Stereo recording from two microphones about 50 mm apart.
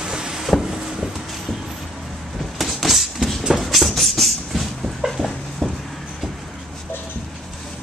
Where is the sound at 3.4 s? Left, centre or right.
Centre.